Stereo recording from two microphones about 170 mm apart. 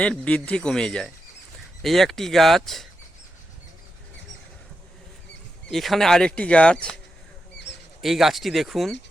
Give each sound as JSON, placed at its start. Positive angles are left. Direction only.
{"t": 0.0, "sound": "speech", "side_deg": 5}
{"t": 5.6, "sound": "speech", "side_deg": 0}
{"t": 8.0, "sound": "speech", "side_deg": 0}